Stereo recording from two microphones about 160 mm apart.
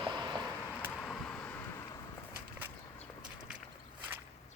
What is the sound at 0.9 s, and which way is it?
Vehicle, 5° left (ahead or behind).